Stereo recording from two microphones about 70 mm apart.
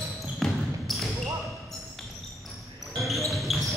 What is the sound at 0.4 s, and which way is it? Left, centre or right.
Basketball bounce, centre.